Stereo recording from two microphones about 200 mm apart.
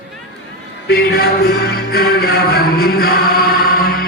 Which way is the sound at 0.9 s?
50° left (ahead or behind).